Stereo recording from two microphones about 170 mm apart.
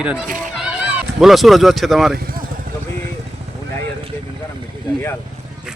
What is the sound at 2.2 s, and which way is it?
Speech, 60° right (ahead or behind).